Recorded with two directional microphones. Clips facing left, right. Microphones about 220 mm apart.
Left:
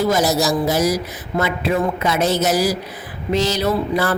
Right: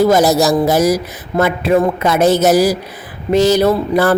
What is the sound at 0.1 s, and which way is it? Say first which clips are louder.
Speech: right 6 dB; 50° right (ahead or behind).